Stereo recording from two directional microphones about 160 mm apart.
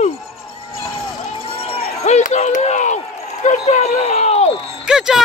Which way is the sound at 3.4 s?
45° left (ahead or behind).